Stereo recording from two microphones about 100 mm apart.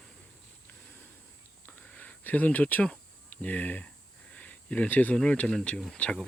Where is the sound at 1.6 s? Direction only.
15° left (ahead or behind).